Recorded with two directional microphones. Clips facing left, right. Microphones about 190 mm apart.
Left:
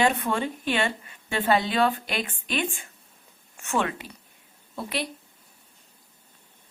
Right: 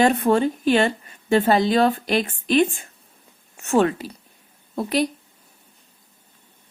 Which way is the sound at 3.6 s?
40° right (ahead or behind).